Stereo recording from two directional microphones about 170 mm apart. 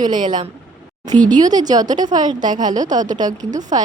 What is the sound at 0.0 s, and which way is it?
Speech, 25° right (ahead or behind).